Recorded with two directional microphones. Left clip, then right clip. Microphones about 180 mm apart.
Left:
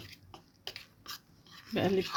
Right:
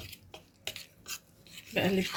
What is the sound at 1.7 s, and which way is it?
Toothbrush, 55° left (ahead or behind).